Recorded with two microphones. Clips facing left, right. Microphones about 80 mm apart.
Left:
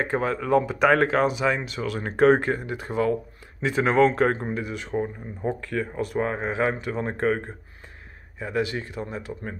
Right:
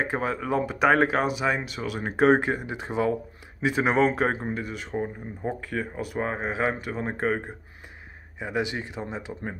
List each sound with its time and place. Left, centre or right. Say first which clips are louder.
0.0 s speech: left 2 dB; centre
8.4 s speech: left 2 dB; centre